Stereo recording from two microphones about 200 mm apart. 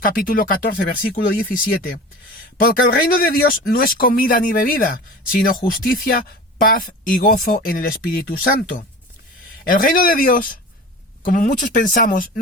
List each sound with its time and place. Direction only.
0.0 s speech: 45° left (ahead or behind)
3.2 s speech: 45° left (ahead or behind)